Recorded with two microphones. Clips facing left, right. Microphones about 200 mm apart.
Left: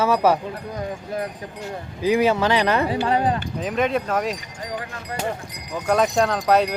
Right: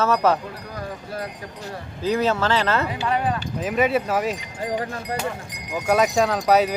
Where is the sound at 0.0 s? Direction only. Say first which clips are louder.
Left 1 dB; 10° left (ahead or behind).